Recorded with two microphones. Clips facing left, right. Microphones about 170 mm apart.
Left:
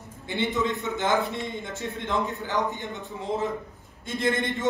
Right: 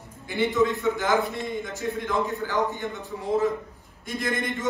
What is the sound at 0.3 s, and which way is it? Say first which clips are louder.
A man's voice: right 4 dB; 20° left (ahead or behind).